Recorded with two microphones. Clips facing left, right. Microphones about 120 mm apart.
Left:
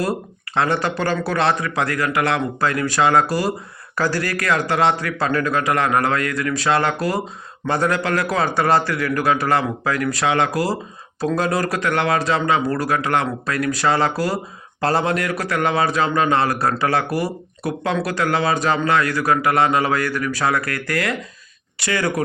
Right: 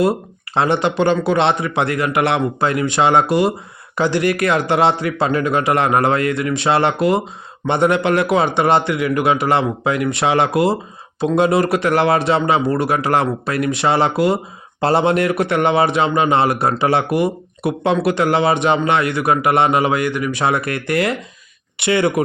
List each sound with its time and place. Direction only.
0.0 s a man's voice: 25° right (ahead or behind)